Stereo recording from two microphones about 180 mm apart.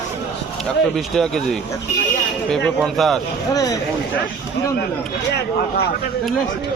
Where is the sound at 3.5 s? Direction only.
20° left (ahead or behind).